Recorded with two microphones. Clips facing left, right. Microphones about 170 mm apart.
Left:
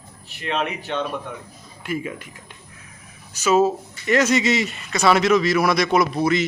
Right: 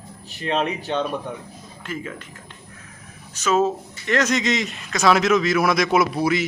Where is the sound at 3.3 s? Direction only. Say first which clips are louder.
Left 2 dB; 10° left (ahead or behind); by 6.5 s 5° right (ahead or behind).